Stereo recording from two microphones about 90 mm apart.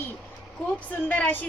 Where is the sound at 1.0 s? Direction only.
20° left (ahead or behind).